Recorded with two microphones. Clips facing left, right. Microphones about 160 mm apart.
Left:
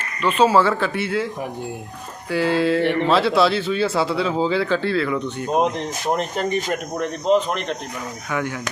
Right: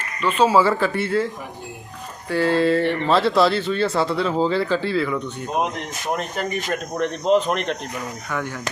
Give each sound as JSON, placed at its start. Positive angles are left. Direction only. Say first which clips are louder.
{"t": 0.2, "sound": "speech", "louder": "left 1 dB", "side_deg": 10}
{"t": 2.3, "sound": "speech", "louder": "right 1 dB", "side_deg": 0}
{"t": 6.1, "sound": "speech", "louder": "left 3 dB", "side_deg": 30}
{"t": 6.9, "sound": "speech", "louder": "even", "side_deg": 0}